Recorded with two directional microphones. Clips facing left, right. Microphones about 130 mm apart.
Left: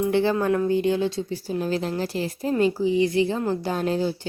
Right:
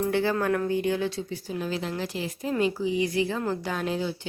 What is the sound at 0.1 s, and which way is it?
A woman's voice, 25° left (ahead or behind).